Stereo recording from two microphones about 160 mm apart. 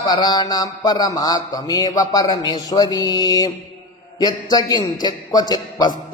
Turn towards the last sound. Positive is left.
turn(degrees=25)  # may be behind; listen again after turning